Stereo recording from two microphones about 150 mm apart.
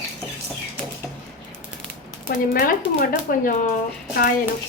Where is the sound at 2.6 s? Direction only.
85° left.